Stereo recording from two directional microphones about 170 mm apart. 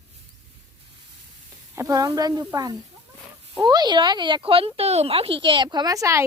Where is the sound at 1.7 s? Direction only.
20° right (ahead or behind).